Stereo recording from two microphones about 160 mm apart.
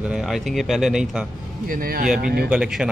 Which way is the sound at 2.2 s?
75° right (ahead or behind).